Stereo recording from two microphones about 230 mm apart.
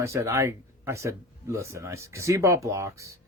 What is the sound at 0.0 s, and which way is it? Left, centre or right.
Speech, centre.